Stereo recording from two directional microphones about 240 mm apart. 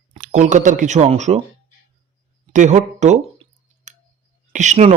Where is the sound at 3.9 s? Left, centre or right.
Right.